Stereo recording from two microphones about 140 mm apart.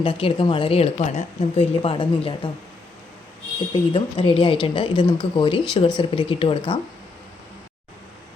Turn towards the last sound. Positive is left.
turn(degrees=40)  # may be behind; listen again after turning